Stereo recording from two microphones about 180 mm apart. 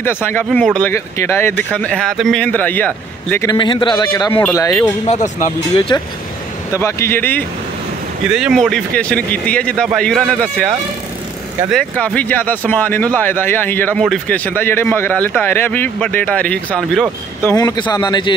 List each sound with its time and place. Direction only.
0.0 s speech: 10° left (ahead or behind)
3.4 s a man's voice: 25° left (ahead or behind)
4.4 s speech: 10° left (ahead or behind)
5.0 s speech: 40° left (ahead or behind)
6.7 s speech: 15° left (ahead or behind)
8.3 s a man's voice: 5° right (ahead or behind)
11.7 s speech: 5° left (ahead or behind)
17.5 s a man's voice: 20° left (ahead or behind)